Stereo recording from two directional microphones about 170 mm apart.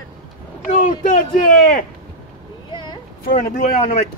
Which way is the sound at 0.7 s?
50° left (ahead or behind).